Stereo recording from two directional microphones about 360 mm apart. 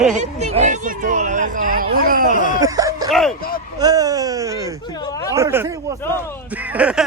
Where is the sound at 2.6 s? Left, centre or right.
Centre.